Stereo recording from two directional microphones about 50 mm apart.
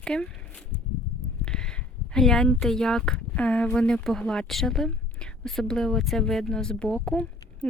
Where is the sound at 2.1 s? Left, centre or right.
Centre.